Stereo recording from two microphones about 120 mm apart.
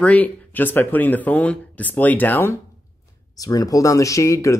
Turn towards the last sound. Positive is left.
turn(degrees=25)  # may be behind; listen again after turning